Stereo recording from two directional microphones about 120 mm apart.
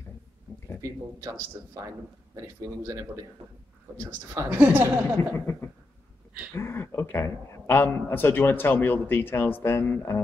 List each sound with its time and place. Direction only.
2.3 s a woman's voice: 25° right (ahead or behind)
5.1 s a man's voice: 20° left (ahead or behind)